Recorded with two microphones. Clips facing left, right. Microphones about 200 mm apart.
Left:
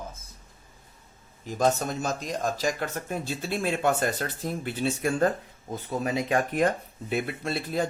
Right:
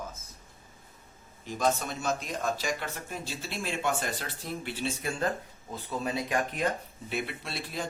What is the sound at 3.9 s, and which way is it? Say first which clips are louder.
Speech: left 6 dB; 45° left (ahead or behind).